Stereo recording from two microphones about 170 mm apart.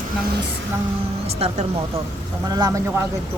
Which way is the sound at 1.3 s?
40° right (ahead or behind).